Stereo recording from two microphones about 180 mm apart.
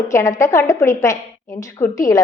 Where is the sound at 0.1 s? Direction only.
15° left (ahead or behind).